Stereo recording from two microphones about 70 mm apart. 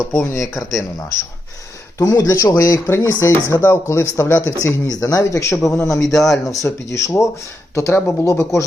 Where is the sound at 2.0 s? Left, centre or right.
Left.